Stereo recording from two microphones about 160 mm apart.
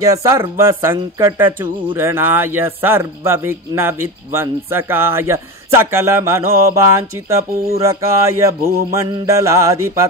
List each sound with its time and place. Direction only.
0.0 s mantra: 20° right (ahead or behind)
0.9 s speech: 20° right (ahead or behind)
8.0 s mantra: 20° right (ahead or behind)